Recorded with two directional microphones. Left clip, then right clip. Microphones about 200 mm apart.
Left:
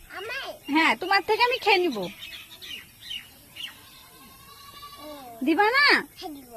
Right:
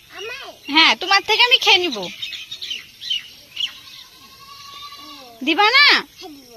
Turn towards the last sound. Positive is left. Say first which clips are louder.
# right 7 dB
turn(degrees=5)  # may be behind; listen again after turning